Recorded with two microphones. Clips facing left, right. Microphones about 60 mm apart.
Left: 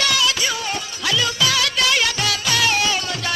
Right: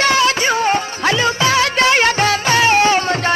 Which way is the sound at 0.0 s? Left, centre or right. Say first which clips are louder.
Right 7 dB; right.